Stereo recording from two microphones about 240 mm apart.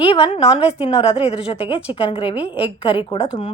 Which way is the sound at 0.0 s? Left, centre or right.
Left.